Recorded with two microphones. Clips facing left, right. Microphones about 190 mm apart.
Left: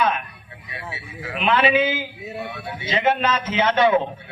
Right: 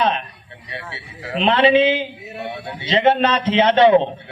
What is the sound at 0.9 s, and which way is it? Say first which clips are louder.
A man's voice: right 6 dB; 30° right (ahead or behind).